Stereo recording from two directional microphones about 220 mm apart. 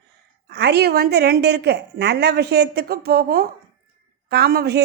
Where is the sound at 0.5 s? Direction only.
50° right (ahead or behind).